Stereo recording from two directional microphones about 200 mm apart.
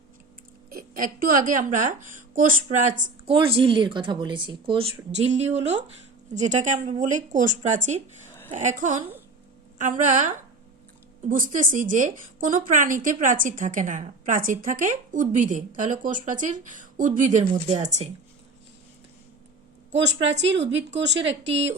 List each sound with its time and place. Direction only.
0.7 s a woman's voice: 45° right (ahead or behind)
3.3 s a woman's voice: 25° right (ahead or behind)
20.9 s speech: 60° right (ahead or behind)
21.2 s speech: 30° right (ahead or behind)